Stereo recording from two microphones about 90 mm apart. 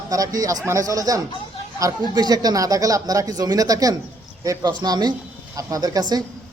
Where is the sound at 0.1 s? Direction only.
40° right (ahead or behind).